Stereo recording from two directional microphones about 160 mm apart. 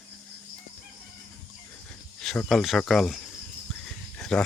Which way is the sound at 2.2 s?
5° left (ahead or behind).